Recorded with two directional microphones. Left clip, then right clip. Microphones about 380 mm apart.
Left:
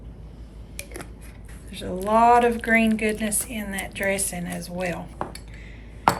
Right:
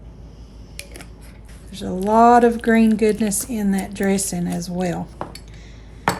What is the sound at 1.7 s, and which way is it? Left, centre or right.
A woman's voice, centre.